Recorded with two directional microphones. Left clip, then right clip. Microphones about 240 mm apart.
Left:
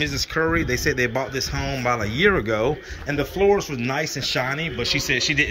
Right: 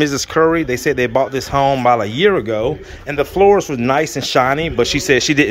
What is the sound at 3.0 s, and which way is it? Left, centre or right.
Speech, centre.